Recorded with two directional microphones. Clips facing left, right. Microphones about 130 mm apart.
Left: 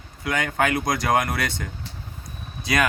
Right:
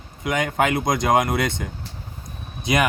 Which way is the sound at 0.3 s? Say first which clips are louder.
Right 2 dB; 20° right (ahead or behind).